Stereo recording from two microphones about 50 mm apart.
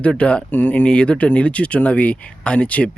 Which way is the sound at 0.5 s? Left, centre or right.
Left.